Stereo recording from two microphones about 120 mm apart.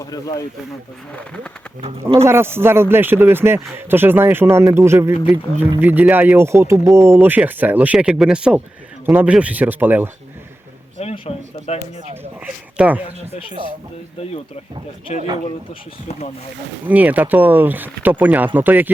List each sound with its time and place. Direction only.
0.0 s speech: 30° left (ahead or behind)
1.8 s speech: 55° right (ahead or behind)
2.2 s speech: 20° right (ahead or behind)
11.0 s speech: 55° left (ahead or behind)
12.7 s speech: 10° right (ahead or behind)
16.8 s speech: 15° right (ahead or behind)